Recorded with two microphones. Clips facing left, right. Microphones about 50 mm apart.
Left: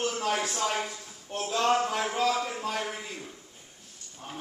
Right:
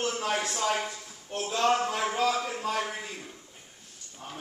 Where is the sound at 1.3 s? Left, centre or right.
Centre.